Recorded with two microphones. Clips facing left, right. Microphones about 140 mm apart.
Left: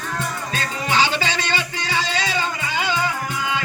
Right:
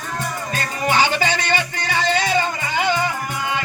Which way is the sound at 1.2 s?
55° right (ahead or behind).